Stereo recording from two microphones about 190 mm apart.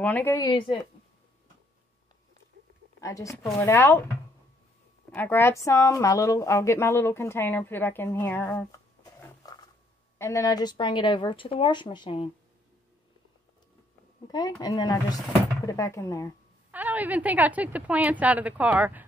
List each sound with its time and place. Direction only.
0.0 s a woman's voice: 10° left (ahead or behind)
3.0 s a woman's voice: 15° left (ahead or behind)
5.1 s a woman's voice: 10° left (ahead or behind)
10.1 s speech: 15° left (ahead or behind)
14.2 s a woman's voice: 20° left (ahead or behind)
16.7 s a woman's voice: 10° right (ahead or behind)